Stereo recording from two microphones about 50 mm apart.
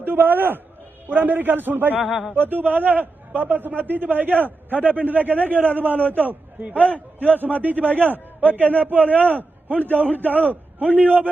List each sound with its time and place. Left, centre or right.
0.0 s a man's voice: right
2.0 s a man's voice: centre
2.3 s a man's voice: right